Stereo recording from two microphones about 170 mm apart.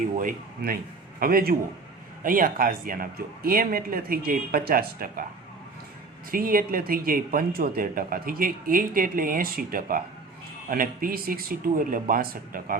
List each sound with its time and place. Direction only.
0.2 s speech: 55° right (ahead or behind)
6.3 s speech: 60° right (ahead or behind)